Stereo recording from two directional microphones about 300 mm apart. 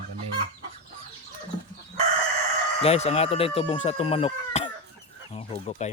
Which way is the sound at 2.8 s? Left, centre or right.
Left.